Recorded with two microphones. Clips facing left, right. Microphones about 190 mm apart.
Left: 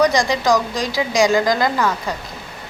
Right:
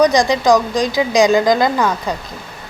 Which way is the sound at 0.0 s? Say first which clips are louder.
Right 4 dB; 20° right (ahead or behind).